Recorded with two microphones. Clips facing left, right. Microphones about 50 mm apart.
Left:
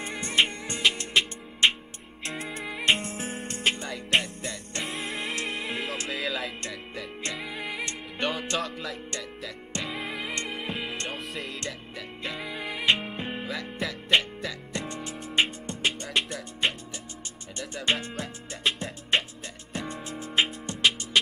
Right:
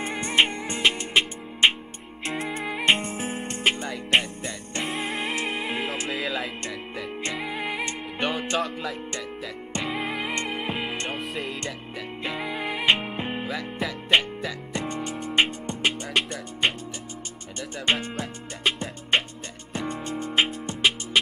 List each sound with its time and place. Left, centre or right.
0.1 s music: centre
7.4 s music: right
8.2 s music: centre
11.0 s music: centre
12.4 s music: right
13.5 s music: centre
15.3 s music: centre
17.6 s music: centre
20.6 s music: centre